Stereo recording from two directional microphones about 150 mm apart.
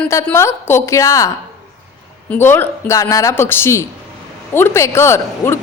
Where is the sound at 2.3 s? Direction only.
15° left (ahead or behind).